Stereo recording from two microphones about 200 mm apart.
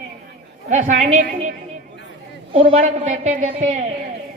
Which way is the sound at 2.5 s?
25° right (ahead or behind).